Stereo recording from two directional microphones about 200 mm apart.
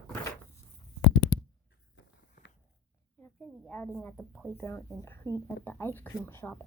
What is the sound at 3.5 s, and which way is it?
A woman's voice, 5° left (ahead or behind).